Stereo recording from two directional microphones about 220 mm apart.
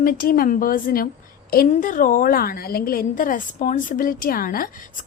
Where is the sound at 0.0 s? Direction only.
40° left (ahead or behind).